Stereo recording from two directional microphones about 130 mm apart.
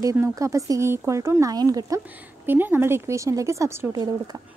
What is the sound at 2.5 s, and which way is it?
Speech, 15° right (ahead or behind).